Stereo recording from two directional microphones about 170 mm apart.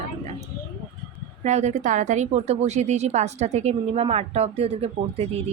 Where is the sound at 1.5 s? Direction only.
40° right (ahead or behind).